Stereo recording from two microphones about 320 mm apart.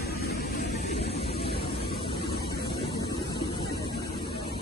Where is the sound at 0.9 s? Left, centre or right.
Centre.